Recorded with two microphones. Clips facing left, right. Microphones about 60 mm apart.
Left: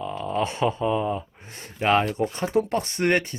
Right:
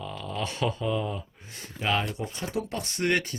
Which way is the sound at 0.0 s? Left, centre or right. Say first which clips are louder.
Left 7 dB; left.